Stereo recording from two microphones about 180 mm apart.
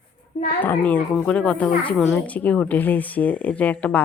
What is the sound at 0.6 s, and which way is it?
Speech, 10° left (ahead or behind).